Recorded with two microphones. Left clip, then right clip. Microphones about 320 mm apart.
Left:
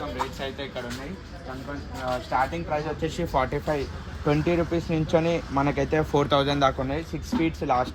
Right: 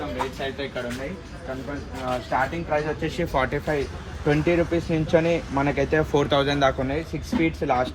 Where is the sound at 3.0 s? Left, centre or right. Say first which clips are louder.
Right 1 dB; left.